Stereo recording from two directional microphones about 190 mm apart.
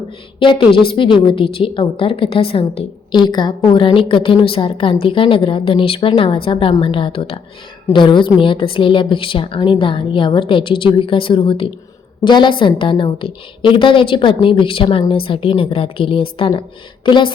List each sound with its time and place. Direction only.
0.3 s a woman's voice: 25° left (ahead or behind)